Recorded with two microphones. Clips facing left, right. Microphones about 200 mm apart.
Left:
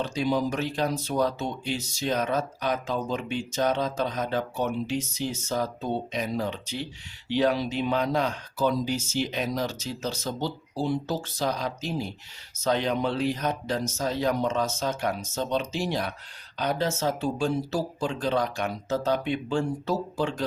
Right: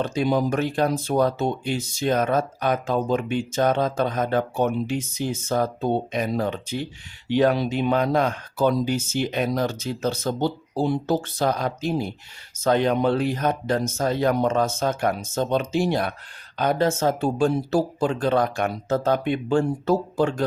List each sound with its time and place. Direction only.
0.0 s speech: 55° right (ahead or behind)